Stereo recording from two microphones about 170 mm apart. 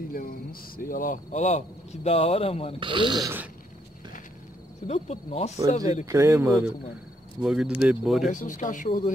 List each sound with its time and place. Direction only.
0.1 s a man's voice: 60° left (ahead or behind); by 2.7 s 35° left (ahead or behind)
2.8 s speech: 30° right (ahead or behind)
4.8 s a man's voice: 40° left (ahead or behind)
6.0 s speech: 15° right (ahead or behind)
7.4 s speech: 5° right (ahead or behind)
8.3 s a man's voice: 50° left (ahead or behind)